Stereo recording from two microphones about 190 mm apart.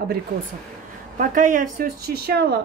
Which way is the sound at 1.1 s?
45° right (ahead or behind).